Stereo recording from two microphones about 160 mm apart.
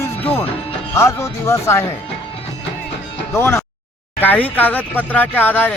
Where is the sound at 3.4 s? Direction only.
15° left (ahead or behind).